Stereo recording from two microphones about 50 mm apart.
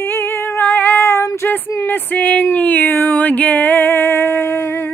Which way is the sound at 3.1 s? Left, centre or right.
Left.